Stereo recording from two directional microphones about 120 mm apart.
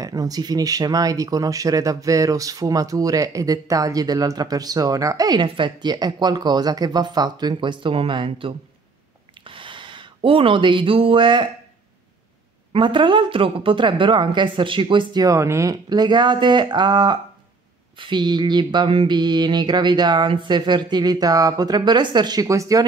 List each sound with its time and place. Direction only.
0.0 s speech: 30° right (ahead or behind)
12.7 s speech: 45° right (ahead or behind)
15.2 s speech: 25° right (ahead or behind)